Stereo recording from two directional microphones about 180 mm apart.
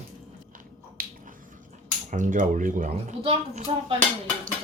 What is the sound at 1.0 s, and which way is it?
Squish, 55° right (ahead or behind).